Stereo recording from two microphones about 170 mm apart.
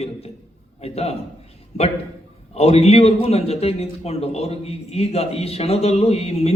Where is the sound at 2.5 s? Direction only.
35° left (ahead or behind).